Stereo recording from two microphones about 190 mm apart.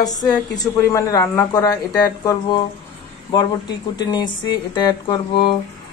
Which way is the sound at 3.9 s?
20° left (ahead or behind).